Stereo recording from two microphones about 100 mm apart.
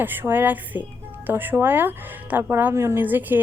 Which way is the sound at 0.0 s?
20° right (ahead or behind).